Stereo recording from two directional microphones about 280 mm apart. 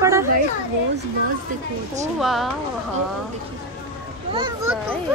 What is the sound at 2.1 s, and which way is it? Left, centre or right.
Speech, centre.